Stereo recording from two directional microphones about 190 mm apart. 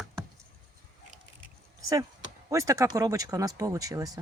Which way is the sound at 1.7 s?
15° right (ahead or behind).